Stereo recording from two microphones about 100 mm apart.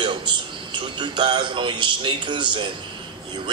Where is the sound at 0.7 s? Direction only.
50° right (ahead or behind).